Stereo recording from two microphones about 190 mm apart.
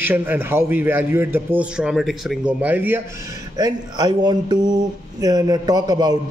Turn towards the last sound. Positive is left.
turn(degrees=-20)  # may be behind; listen again after turning